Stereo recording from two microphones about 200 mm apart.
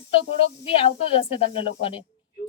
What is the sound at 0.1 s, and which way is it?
A woman's voice, 30° left (ahead or behind).